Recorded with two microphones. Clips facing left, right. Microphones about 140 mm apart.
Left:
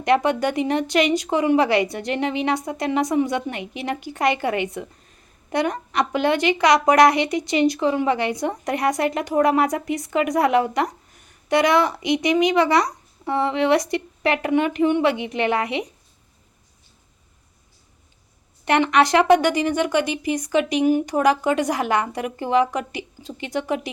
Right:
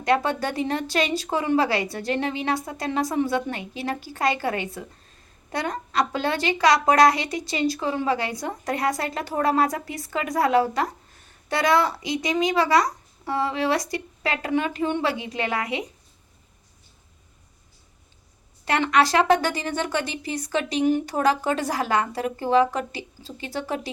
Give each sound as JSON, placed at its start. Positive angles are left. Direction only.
{"t": 0.0, "sound": "a woman's voice", "side_deg": 20}
{"t": 18.6, "sound": "a woman's voice", "side_deg": 20}